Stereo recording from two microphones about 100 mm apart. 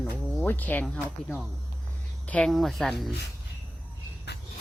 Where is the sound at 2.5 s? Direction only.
Centre (ahead or behind).